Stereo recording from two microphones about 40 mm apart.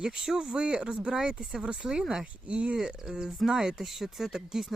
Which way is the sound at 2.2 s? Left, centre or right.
Right.